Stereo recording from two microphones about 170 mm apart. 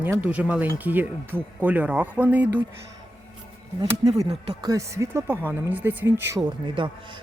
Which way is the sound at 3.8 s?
20° right (ahead or behind).